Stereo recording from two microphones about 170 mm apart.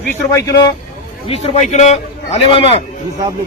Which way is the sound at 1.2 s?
40° left (ahead or behind).